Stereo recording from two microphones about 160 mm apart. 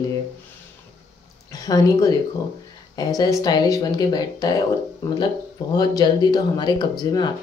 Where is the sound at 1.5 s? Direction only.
25° left (ahead or behind).